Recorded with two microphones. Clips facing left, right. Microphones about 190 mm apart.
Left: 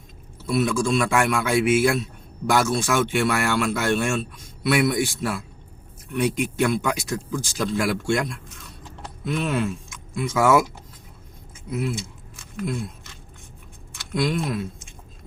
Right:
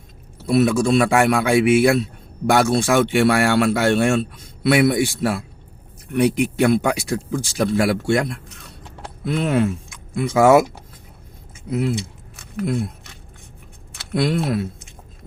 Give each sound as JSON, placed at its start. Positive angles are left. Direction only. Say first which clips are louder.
{"t": 0.4, "sound": "speech", "louder": "right 5 dB", "side_deg": -60}
{"t": 8.2, "sound": "a sound", "louder": "right 3 dB", "side_deg": -60}
{"t": 10.2, "sound": "speech", "louder": "right 5 dB", "side_deg": -60}
{"t": 11.7, "sound": "speech", "louder": "right 5 dB", "side_deg": -55}
{"t": 12.5, "sound": "a sound", "louder": "right 5 dB", "side_deg": -65}
{"t": 13.9, "sound": "speech", "louder": "right 4 dB", "side_deg": -60}